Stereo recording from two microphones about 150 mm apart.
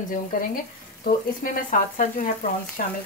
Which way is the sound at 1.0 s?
65° left (ahead or behind).